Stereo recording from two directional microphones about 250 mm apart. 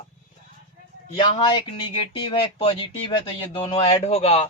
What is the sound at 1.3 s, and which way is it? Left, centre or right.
Speech, centre.